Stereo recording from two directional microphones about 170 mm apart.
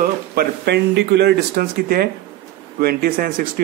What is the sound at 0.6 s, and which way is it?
Speech, 75° right (ahead or behind).